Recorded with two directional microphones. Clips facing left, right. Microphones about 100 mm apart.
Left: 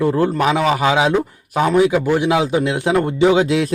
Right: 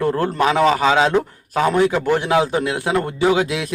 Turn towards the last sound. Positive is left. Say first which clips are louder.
# left 4 dB
turn(degrees=30)  # may be behind; listen again after turning